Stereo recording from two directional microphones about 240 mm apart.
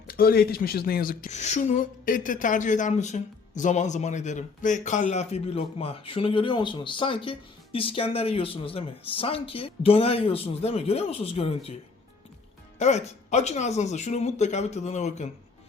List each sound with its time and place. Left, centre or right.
0.1 s speech: left
12.8 s speech: left